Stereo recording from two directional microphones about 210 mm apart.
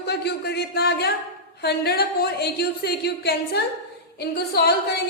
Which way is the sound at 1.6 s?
50° left (ahead or behind).